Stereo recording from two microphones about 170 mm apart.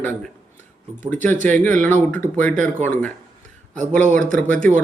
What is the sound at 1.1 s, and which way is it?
A man's voice, 10° left (ahead or behind).